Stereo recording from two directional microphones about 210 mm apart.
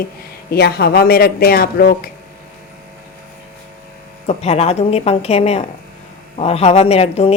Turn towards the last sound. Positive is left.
turn(degrees=30)  # may be behind; listen again after turning